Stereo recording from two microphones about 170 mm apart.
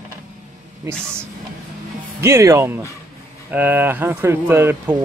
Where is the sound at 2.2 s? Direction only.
15° right (ahead or behind).